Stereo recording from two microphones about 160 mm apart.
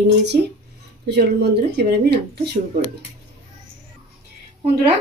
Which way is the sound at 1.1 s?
90° right.